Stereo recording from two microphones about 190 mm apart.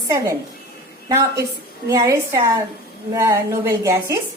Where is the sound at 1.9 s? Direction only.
15° right (ahead or behind).